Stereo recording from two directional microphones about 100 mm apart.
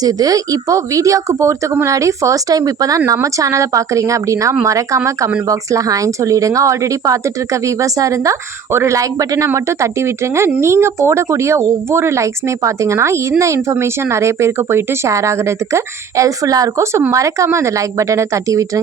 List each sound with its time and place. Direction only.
0.0 s a woman's voice: 40° right (ahead or behind)